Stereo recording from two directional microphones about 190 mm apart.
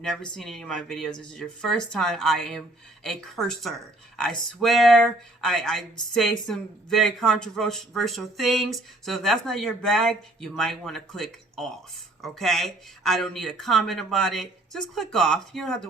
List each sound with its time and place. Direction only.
0.0 s speech: 5° left (ahead or behind)